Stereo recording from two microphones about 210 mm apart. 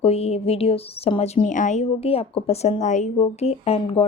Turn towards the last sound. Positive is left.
turn(degrees=30)  # may be behind; listen again after turning